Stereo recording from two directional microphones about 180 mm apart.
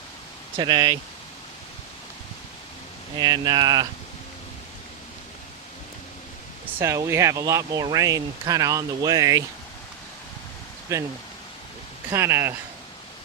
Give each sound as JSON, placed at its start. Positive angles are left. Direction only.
{"t": 0.5, "sound": "speech", "side_deg": -25}
{"t": 3.2, "sound": "speech", "side_deg": -20}
{"t": 6.7, "sound": "speech", "side_deg": -15}
{"t": 10.9, "sound": "speech", "side_deg": -15}
{"t": 12.1, "sound": "speech", "side_deg": -15}